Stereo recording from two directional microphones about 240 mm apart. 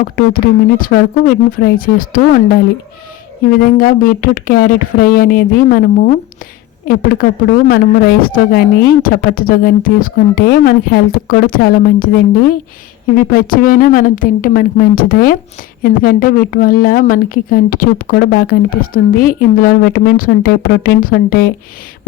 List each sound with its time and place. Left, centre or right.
0.0 s a woman's voice: left
3.6 s a woman's voice: left